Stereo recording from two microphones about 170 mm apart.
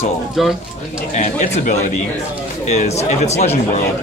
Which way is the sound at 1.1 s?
45° left (ahead or behind).